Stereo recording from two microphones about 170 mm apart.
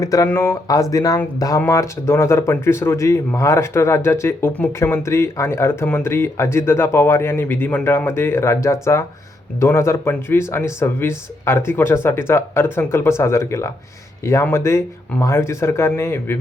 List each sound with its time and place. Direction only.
0.0 s speech: 20° left (ahead or behind)